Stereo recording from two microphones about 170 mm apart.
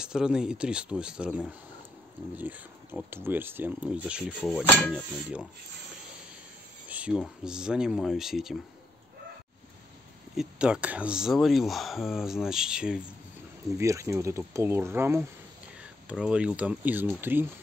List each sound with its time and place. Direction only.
0.0 s speech: 5° right (ahead or behind)
4.4 s speech: 5° left (ahead or behind)
6.9 s speech: 5° right (ahead or behind)
10.3 s speech: 5° right (ahead or behind)
13.7 s speech: 20° right (ahead or behind)